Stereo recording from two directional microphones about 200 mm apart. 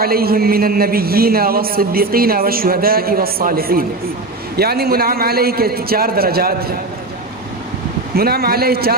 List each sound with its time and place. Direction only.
0.0 s a man's voice: 50° right (ahead or behind)
8.1 s a man's voice: 50° right (ahead or behind)